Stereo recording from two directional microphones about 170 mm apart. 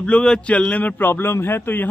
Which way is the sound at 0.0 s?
5° left (ahead or behind).